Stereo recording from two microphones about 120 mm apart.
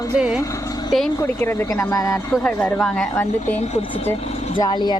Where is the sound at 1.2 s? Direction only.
20° left (ahead or behind).